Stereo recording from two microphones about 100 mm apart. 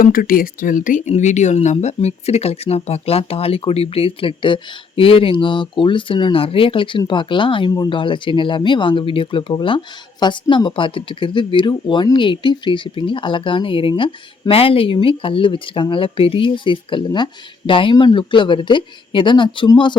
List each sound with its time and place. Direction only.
1.1 s speech: 90° left; by 20.0 s 50° left (ahead or behind)